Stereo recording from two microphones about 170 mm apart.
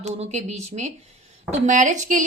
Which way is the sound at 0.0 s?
40° right (ahead or behind).